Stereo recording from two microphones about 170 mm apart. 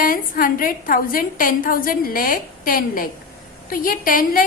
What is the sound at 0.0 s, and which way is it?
A woman's voice, 55° left (ahead or behind).